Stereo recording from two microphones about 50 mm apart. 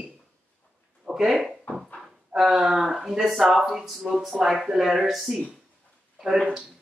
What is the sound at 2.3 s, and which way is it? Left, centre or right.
Speech, centre.